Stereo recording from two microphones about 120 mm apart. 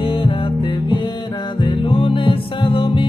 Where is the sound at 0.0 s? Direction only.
50° left (ahead or behind).